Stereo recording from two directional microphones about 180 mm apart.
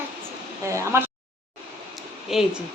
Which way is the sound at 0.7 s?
15° right (ahead or behind).